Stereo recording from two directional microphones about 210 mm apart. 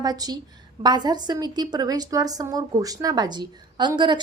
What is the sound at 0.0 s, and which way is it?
A woman's voice, 20° right (ahead or behind).